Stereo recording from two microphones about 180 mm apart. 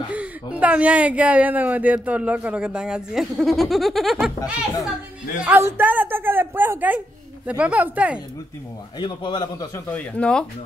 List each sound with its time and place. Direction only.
0.1 s speech: 5° right (ahead or behind)
5.4 s speech: 10° right (ahead or behind)
9.0 s a man's voice: 25° left (ahead or behind)
9.8 s speech: 10° left (ahead or behind)